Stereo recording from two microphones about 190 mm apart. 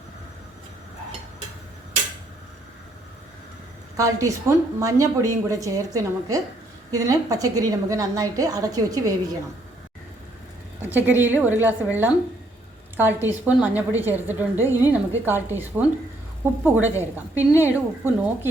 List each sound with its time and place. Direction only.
3.9 s a woman's voice: 15° right (ahead or behind)
10.8 s a woman's voice: 10° right (ahead or behind)